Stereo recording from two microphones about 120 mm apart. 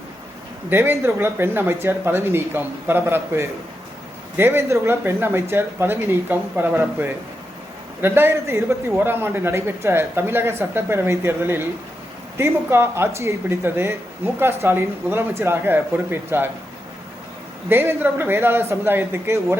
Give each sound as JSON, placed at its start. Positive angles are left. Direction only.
{"t": 0.7, "sound": "a man's voice", "side_deg": -20}
{"t": 17.7, "sound": "a man's voice", "side_deg": -20}